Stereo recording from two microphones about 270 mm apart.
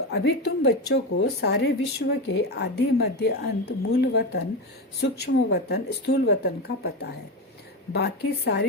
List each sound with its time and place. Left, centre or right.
0.1 s speech: left